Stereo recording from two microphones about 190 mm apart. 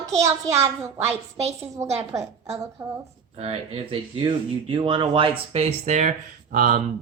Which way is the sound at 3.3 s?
30° right (ahead or behind).